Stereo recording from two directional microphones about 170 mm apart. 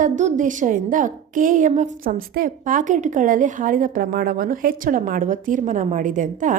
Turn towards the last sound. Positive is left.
turn(degrees=-50)  # may be behind; listen again after turning